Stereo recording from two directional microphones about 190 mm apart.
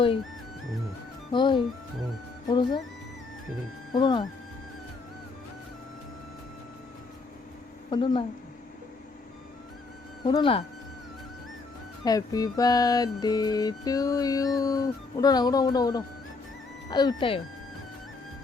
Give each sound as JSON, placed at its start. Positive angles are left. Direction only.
{"t": 1.3, "sound": "music", "side_deg": 25}
{"t": 3.9, "sound": "music", "side_deg": 25}
{"t": 7.9, "sound": "music", "side_deg": 25}
{"t": 10.2, "sound": "music", "side_deg": 25}
{"t": 12.0, "sound": "music", "side_deg": 20}